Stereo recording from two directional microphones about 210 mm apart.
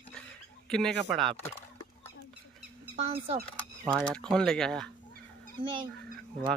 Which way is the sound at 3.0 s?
25° right (ahead or behind).